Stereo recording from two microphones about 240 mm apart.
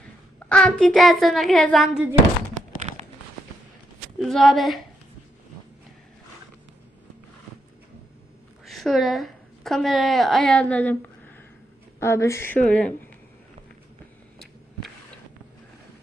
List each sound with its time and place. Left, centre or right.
0.3 s a woman's voice: centre
3.0 s fireworks: right
4.2 s a woman's voice: centre
8.6 s a woman's voice: centre
11.9 s speech: centre